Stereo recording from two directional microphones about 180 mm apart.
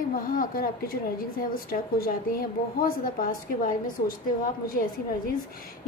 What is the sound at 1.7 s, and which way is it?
A woman's voice, 55° left (ahead or behind).